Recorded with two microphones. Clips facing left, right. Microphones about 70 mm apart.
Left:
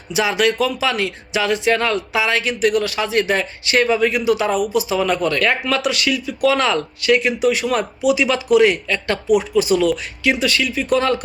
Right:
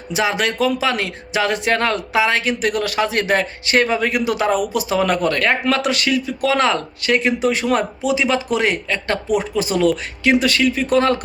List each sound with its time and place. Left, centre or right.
0.1 s speech: right